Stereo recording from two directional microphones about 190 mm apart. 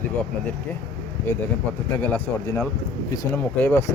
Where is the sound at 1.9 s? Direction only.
10° left (ahead or behind).